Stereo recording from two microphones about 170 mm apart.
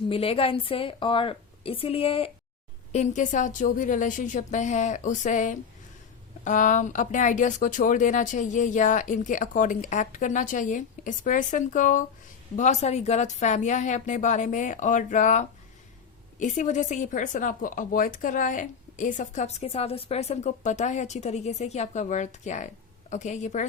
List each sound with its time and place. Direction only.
0.1 s a woman's voice: 35° left (ahead or behind)
2.9 s speech: 45° left (ahead or behind)